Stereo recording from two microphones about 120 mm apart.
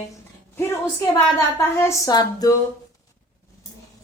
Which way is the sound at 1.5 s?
25° left (ahead or behind).